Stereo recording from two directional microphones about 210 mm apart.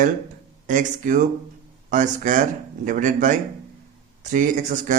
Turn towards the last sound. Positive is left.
turn(degrees=-35)  # may be behind; listen again after turning